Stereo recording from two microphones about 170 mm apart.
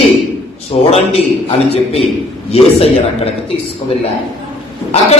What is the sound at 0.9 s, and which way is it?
A man's voice, 35° left (ahead or behind).